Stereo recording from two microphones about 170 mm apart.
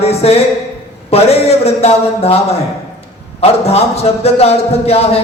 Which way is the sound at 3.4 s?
35° left (ahead or behind).